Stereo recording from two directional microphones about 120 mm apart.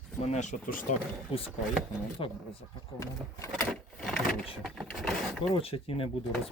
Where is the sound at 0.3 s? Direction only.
85° left.